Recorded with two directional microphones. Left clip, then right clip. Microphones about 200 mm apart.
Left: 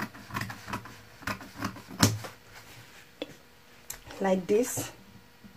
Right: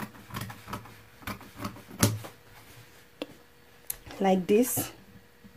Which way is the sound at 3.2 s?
25° right (ahead or behind).